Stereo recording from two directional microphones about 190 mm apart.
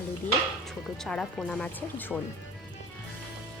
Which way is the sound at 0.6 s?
Centre (ahead or behind).